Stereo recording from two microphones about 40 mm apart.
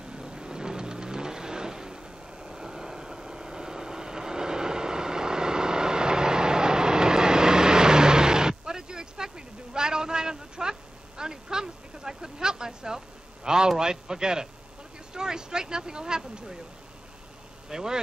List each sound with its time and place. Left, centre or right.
0.1 s vehicle: right
9.8 s a sound: centre
17.6 s speech: centre